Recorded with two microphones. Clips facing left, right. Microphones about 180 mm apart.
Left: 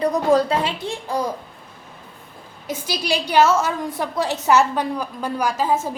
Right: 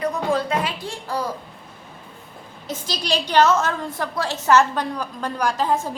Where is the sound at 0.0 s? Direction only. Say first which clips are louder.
Left 5 dB; 40° left (ahead or behind).